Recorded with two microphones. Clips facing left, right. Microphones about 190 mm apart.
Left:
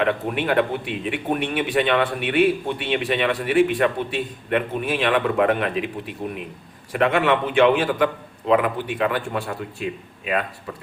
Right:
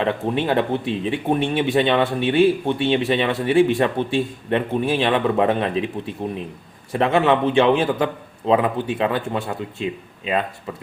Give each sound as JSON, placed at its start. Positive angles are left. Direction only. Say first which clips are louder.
{"t": 0.0, "sound": "speech", "louder": "right 1 dB", "side_deg": -30}